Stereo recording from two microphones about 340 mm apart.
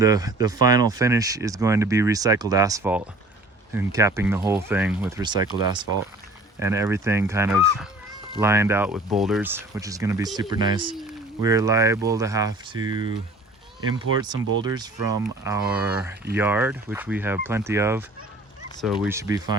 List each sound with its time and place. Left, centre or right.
0.0 s speech: centre
6.6 s speech: centre